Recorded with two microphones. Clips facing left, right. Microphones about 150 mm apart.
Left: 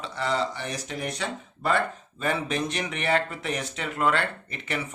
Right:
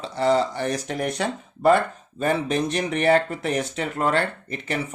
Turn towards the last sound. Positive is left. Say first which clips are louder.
# right 4 dB
turn(degrees=-40)  # may be behind; listen again after turning